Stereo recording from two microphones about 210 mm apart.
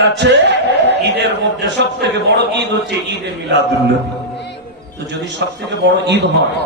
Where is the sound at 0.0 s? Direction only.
55° right (ahead or behind).